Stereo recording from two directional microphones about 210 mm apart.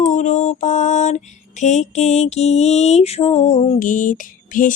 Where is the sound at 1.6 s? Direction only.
35° left (ahead or behind).